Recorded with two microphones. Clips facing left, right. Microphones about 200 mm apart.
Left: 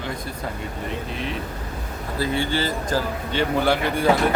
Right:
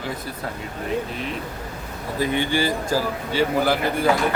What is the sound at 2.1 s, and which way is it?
Speech, 15° right (ahead or behind).